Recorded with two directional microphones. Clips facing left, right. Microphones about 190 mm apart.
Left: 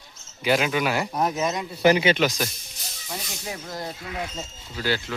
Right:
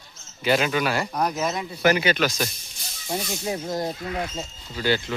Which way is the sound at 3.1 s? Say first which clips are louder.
Right 7 dB; 30° right (ahead or behind).